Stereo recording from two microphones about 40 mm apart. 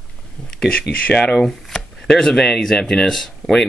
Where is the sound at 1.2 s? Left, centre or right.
Centre.